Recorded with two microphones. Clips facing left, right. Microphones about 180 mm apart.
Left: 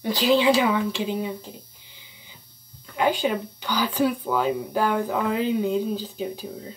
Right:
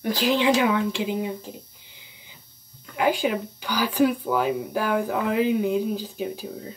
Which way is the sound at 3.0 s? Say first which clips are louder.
Even; 10° right (ahead or behind).